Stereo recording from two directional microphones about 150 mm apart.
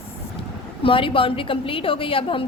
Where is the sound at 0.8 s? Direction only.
35° left (ahead or behind).